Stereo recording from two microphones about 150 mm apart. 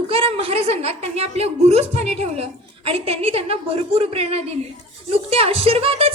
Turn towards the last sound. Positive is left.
turn(degrees=-40)  # may be behind; listen again after turning